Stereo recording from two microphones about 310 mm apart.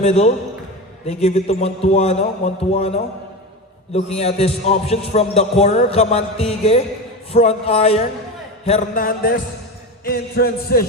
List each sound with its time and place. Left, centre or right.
0.0 s a man's voice: centre